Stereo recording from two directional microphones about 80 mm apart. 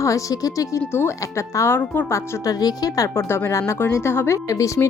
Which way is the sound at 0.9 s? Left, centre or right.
Left.